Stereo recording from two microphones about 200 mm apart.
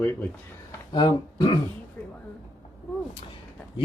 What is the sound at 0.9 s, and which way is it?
Speech, 20° left (ahead or behind).